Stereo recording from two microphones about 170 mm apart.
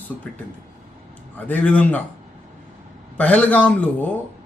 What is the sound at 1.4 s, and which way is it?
Speech, 10° left (ahead or behind).